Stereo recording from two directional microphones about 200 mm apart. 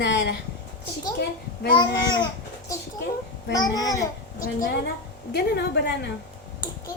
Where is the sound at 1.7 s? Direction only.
20° left (ahead or behind).